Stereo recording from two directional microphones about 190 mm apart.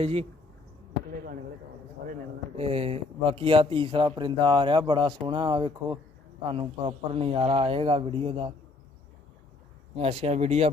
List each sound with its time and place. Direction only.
0.0 s speech: 30° right (ahead or behind)
2.6 s a man's voice: 30° right (ahead or behind)
10.0 s speech: 30° right (ahead or behind)